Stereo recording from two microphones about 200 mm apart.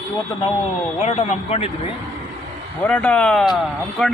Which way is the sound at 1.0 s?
30° left (ahead or behind).